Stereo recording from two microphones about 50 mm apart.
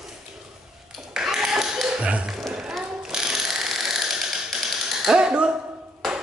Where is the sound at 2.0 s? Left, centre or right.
Right.